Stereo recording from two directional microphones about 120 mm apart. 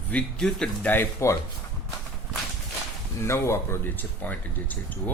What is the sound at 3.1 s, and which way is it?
Speech, 20° left (ahead or behind).